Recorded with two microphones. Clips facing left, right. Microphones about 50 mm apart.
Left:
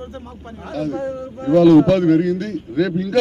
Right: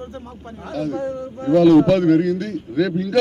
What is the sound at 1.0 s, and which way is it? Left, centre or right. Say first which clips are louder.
Speech: even; left.